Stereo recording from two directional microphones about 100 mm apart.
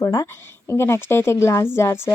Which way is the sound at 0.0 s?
30° left (ahead or behind).